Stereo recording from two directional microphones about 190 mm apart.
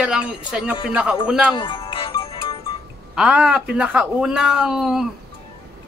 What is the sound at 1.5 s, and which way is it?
Music, 25° left (ahead or behind).